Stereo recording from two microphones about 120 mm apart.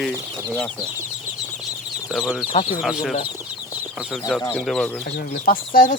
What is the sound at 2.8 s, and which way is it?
Speech, centre (ahead or behind).